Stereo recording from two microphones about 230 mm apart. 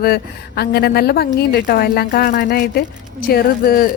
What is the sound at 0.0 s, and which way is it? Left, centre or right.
A woman's voice, left.